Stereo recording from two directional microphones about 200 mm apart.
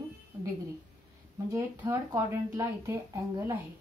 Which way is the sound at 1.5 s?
15° right (ahead or behind).